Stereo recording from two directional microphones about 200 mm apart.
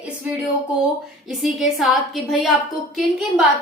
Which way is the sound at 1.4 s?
Centre (ahead or behind).